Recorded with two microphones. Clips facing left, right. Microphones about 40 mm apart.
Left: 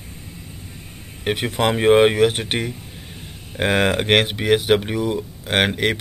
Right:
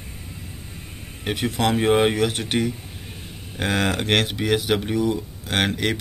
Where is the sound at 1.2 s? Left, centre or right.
Left.